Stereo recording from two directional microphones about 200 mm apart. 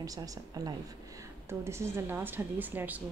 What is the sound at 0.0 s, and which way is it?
A woman's voice, 15° right (ahead or behind).